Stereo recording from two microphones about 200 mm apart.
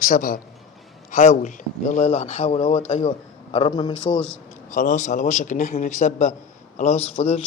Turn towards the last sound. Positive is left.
turn(degrees=30)  # may be behind; listen again after turning